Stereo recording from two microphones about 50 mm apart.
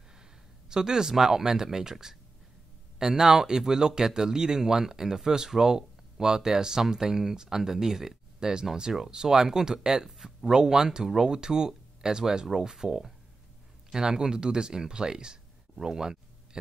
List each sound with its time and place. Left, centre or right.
0.7 s speech: centre